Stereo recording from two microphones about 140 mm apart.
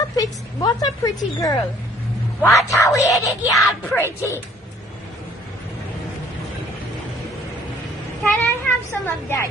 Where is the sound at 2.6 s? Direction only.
25° left (ahead or behind).